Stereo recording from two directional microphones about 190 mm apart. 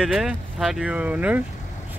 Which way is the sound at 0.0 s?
Centre (ahead or behind).